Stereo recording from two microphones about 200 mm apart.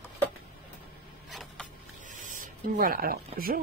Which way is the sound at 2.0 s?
40° right (ahead or behind).